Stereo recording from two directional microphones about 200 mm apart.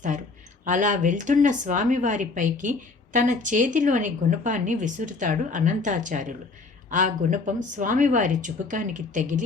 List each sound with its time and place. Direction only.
0.6 s speech: 40° right (ahead or behind)